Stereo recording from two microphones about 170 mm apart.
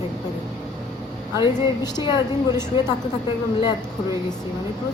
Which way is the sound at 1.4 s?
25° left (ahead or behind).